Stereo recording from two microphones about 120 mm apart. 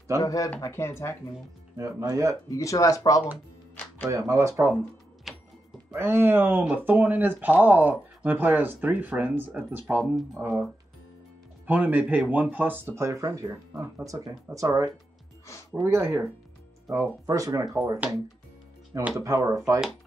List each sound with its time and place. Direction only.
0.2 s speech: 30° left (ahead or behind)
1.8 s speech: 25° right (ahead or behind)
2.5 s speech: 30° left (ahead or behind)
3.7 s music: 15° left (ahead or behind)
4.1 s speech: 25° right (ahead or behind)
5.3 s a sound: centre (ahead or behind)
5.9 s speech: 20° right (ahead or behind)
11.6 s speech: 15° right (ahead or behind); by 17.6 s 30° right (ahead or behind)
18.9 s speech: 25° right (ahead or behind)